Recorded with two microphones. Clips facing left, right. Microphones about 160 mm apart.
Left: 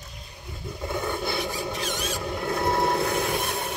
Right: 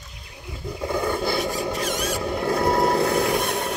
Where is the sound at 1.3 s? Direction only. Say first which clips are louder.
Right 5 dB; 70° right (ahead or behind).